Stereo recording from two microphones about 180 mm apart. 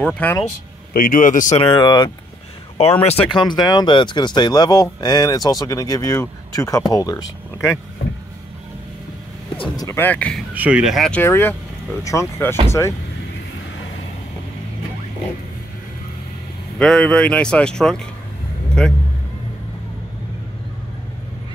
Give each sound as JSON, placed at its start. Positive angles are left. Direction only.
{"t": 0.0, "sound": "speech", "side_deg": 10}
{"t": 0.9, "sound": "a man's voice", "side_deg": 50}
{"t": 1.6, "sound": "speech", "side_deg": 25}
{"t": 2.8, "sound": "speech", "side_deg": 35}
{"t": 9.6, "sound": "speech", "side_deg": 20}
{"t": 10.5, "sound": "speech", "side_deg": -10}
{"t": 16.7, "sound": "speech", "side_deg": 5}